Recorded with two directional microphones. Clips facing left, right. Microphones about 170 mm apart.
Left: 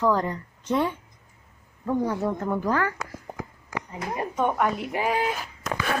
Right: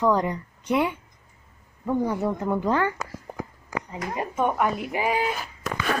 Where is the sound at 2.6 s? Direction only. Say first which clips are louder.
Right 2 dB; 25° right (ahead or behind).